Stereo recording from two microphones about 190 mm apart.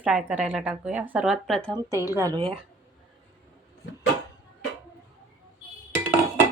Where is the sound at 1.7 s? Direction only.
15° right (ahead or behind).